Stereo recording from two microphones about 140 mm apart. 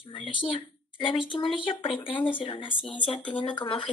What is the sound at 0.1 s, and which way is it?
A woman's voice, 35° left (ahead or behind).